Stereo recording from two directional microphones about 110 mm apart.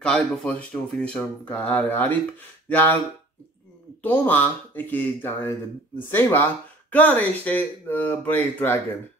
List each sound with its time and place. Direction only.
0.0 s speech: 5° left (ahead or behind)
4.0 s speech: 15° left (ahead or behind)